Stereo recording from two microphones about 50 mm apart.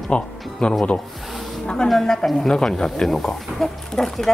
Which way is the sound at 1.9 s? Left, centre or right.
Centre.